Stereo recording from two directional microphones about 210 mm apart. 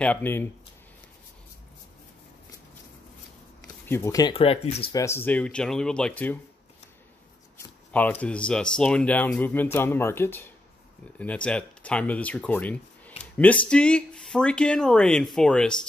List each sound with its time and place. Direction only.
0.0 s speech: 10° left (ahead or behind)
3.6 s a sound: 15° left (ahead or behind)
4.3 s speech: 25° left (ahead or behind)
4.9 s speech: 15° left (ahead or behind)
7.9 s speech: 5° left (ahead or behind)